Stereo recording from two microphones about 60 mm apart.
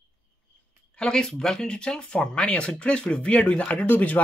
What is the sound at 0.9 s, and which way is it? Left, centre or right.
Speech, centre.